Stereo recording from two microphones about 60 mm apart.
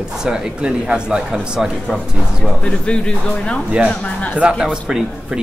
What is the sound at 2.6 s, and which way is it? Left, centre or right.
A woman's voice, centre.